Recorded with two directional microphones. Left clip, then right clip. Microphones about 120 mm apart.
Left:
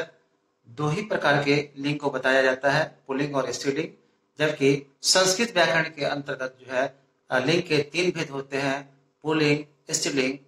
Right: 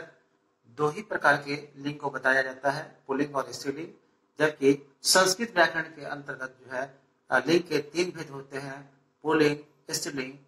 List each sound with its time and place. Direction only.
0.7 s speech: 25° left (ahead or behind)